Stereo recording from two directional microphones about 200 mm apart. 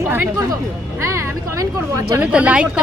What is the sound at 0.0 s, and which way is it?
Music, 10° right (ahead or behind).